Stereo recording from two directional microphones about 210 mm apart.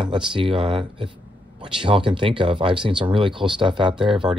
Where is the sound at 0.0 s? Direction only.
20° right (ahead or behind).